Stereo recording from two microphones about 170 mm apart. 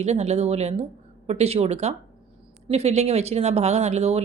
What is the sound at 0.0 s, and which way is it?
Speech, 40° right (ahead or behind).